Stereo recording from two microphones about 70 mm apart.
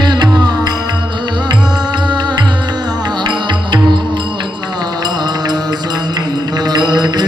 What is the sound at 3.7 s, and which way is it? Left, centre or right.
Music, right.